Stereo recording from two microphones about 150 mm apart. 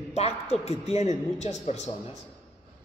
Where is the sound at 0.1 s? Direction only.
45° left (ahead or behind).